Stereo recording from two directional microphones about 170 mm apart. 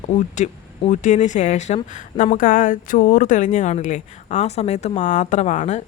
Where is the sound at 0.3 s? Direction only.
45° left (ahead or behind).